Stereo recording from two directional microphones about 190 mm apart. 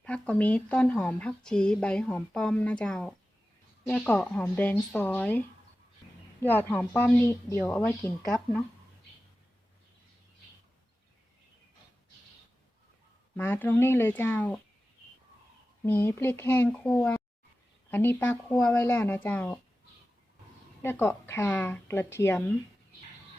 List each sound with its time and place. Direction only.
0.0 s speech: 5° left (ahead or behind)
6.4 s speech: 10° left (ahead or behind)
13.3 s speech: 10° left (ahead or behind)
15.9 s speech: 10° left (ahead or behind)
20.8 s speech: 10° left (ahead or behind)